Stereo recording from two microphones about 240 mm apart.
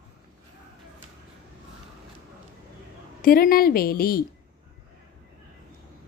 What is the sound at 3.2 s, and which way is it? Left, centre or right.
Speech, left.